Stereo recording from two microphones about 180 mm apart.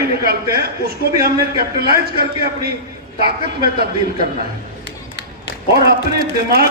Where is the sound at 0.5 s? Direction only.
60° right (ahead or behind).